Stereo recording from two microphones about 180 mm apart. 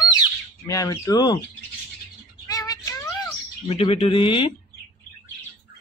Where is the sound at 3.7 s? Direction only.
35° left (ahead or behind).